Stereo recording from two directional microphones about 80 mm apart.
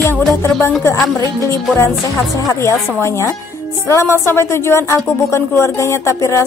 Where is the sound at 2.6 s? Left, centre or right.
Left.